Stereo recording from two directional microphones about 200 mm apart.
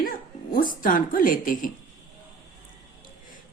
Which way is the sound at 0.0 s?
45° left (ahead or behind).